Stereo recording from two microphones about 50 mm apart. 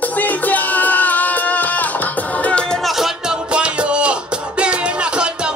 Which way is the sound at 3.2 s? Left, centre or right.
Right.